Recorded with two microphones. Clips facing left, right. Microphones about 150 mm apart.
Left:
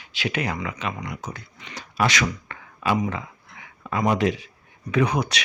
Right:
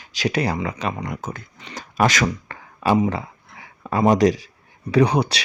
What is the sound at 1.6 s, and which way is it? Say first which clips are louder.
Speech: right 4 dB; 40° right (ahead or behind).